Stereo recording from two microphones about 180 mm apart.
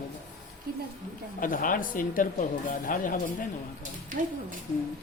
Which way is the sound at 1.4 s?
50° left (ahead or behind).